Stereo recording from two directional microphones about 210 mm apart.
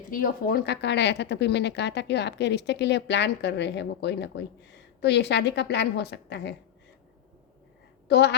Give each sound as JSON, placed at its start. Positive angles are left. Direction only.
{"t": 0.1, "sound": "speech", "side_deg": 45}
{"t": 8.0, "sound": "speech", "side_deg": 50}